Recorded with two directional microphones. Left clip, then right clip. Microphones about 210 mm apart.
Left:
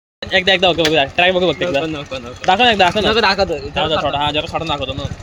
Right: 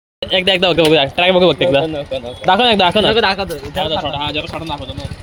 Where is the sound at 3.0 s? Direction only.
10° right (ahead or behind).